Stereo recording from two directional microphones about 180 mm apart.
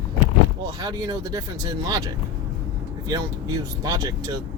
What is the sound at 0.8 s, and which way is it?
Speech, 25° right (ahead or behind).